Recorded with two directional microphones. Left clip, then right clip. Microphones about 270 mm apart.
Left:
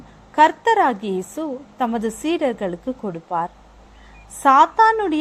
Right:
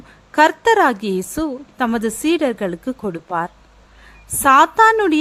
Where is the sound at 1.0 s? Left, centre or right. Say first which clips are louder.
Right 3 dB; right.